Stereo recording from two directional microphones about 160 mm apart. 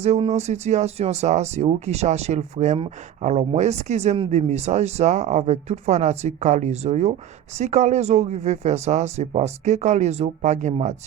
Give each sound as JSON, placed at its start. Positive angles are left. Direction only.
{"t": 0.0, "sound": "speech", "side_deg": -40}